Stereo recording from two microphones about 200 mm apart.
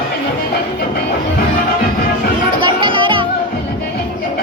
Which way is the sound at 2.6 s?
25° right (ahead or behind).